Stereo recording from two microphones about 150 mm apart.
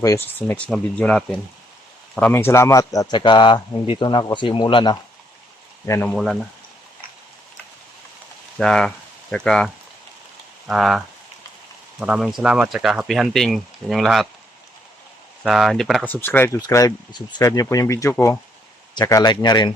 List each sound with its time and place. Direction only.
0.0 s a man's voice: 15° left (ahead or behind)
5.8 s speech: 15° left (ahead or behind)
6.1 s speech: centre (ahead or behind)
8.5 s speech: 5° left (ahead or behind)
15.4 s speech: centre (ahead or behind)
16.0 s speech: 15° left (ahead or behind)
16.6 s a man's voice: 25° left (ahead or behind)